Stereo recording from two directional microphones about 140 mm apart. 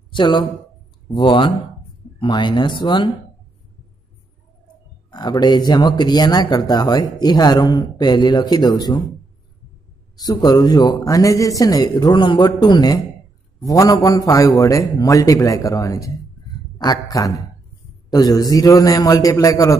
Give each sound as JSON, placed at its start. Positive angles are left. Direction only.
{"t": 0.1, "sound": "speech", "side_deg": 35}
{"t": 5.1, "sound": "speech", "side_deg": 30}
{"t": 10.1, "sound": "a man's voice", "side_deg": 30}